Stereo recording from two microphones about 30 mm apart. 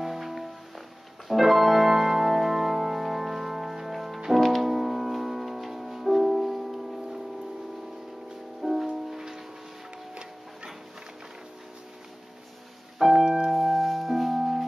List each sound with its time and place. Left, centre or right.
0.0 s music: centre
4.6 s music: centre
8.5 s music: centre
13.1 s keyboard: right
13.5 s music: centre